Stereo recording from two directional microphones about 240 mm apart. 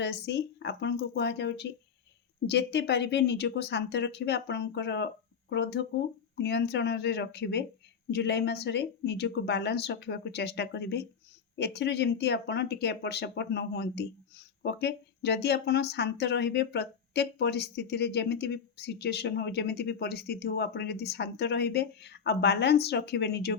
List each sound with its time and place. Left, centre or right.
0.3 s speech: left